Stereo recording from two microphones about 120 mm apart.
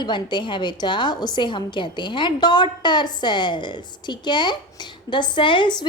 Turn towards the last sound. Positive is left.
turn(degrees=40)  # may be behind; listen again after turning